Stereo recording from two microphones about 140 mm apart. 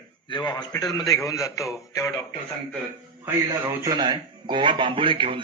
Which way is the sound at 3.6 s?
25° right (ahead or behind).